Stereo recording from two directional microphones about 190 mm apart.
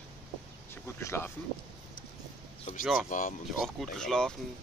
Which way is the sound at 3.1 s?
45° left (ahead or behind).